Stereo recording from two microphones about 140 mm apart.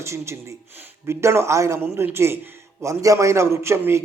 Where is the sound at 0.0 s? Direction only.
20° right (ahead or behind).